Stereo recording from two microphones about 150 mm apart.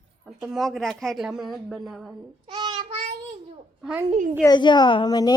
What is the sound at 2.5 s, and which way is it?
Child singing, 30° right (ahead or behind).